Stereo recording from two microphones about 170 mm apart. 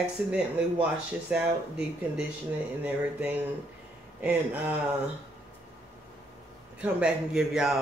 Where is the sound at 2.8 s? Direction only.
10° right (ahead or behind).